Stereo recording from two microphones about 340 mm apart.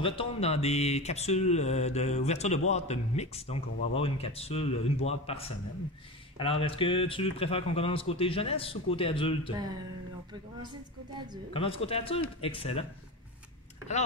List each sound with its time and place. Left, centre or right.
0.0 s speech: centre
11.5 s speech: centre